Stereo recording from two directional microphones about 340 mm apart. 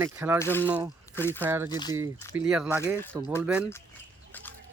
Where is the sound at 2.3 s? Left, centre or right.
Centre.